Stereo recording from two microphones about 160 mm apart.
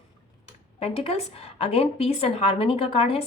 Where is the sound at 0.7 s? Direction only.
40° left (ahead or behind).